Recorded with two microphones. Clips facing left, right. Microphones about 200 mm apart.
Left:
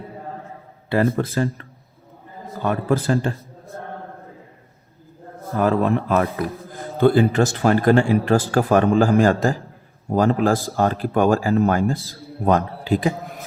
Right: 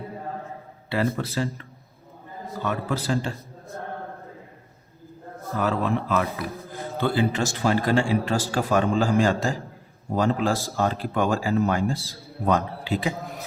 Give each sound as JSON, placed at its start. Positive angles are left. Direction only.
{"t": 0.9, "sound": "speech", "side_deg": 50}
{"t": 5.5, "sound": "speech", "side_deg": 50}